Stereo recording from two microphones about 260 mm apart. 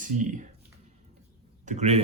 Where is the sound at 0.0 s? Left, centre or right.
Right.